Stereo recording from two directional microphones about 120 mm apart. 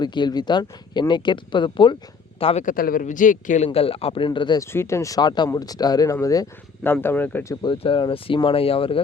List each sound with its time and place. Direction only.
0.0 s speech: 40° left (ahead or behind)
2.6 s a man's voice: 90° left
3.7 s speech: 55° left (ahead or behind)
4.3 s speech: 35° left (ahead or behind)
4.6 s speech: 20° left (ahead or behind)
6.8 s speech: 15° left (ahead or behind)
7.6 s speech: 45° left (ahead or behind)